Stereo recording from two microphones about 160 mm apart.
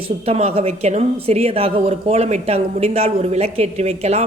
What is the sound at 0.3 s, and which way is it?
A woman's voice, 40° right (ahead or behind).